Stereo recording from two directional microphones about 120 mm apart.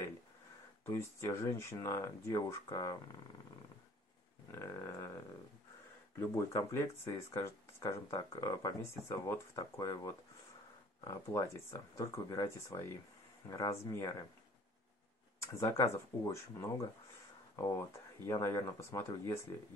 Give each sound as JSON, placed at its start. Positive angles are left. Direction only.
{"t": 0.8, "sound": "speech", "side_deg": 25}
{"t": 4.5, "sound": "a sound", "side_deg": 25}
{"t": 6.1, "sound": "speech", "side_deg": 25}
{"t": 15.4, "sound": "speech", "side_deg": 25}